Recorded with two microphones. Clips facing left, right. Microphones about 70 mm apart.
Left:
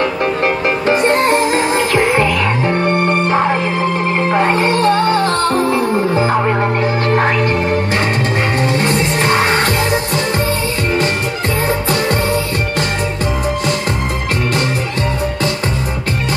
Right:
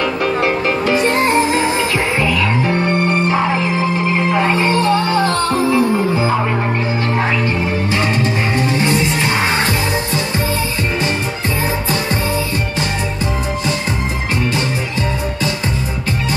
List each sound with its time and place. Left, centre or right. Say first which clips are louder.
0.0 s music: left 1 dB; left
8.7 s music: left 1 dB; left